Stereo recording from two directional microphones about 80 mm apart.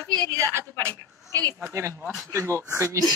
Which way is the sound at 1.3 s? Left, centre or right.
Right.